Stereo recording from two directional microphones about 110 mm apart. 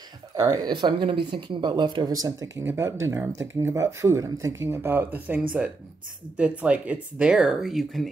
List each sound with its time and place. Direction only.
0.5 s speech: 45° right (ahead or behind)
2.6 s speech: 20° right (ahead or behind); by 8.1 s centre (ahead or behind)